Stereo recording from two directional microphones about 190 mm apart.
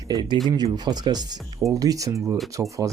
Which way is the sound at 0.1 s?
20° right (ahead or behind).